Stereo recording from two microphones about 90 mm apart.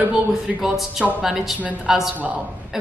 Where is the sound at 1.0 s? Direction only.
Centre (ahead or behind).